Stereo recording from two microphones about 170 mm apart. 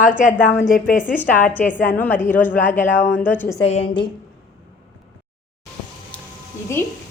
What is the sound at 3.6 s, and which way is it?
Speech, 35° left (ahead or behind).